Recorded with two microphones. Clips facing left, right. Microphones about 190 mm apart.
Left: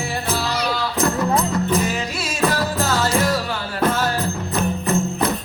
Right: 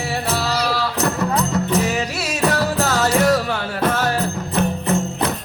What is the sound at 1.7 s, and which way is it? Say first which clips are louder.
Music: right 1 dB; 65° right (ahead or behind).